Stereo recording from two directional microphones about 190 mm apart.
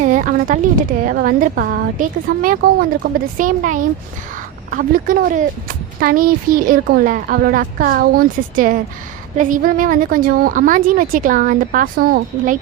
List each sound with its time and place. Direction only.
0.0 s speech: 45° right (ahead or behind)